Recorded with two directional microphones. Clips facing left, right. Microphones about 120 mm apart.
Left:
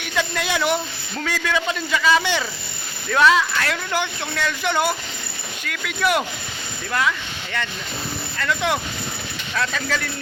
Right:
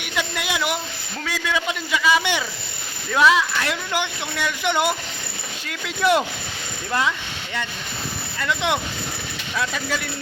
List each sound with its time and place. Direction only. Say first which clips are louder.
0.0 s speech: left 2 dB; 15° right (ahead or behind)
8.4 s speech: even; 20° right (ahead or behind)